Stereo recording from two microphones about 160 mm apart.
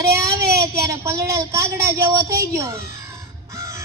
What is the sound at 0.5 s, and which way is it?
Speech, 20° right (ahead or behind).